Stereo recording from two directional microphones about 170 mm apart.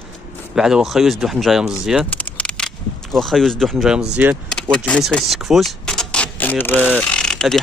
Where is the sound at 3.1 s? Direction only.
Centre (ahead or behind).